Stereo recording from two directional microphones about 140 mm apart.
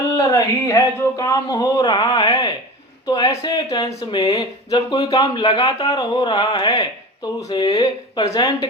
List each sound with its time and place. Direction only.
0.2 s speech: 25° left (ahead or behind)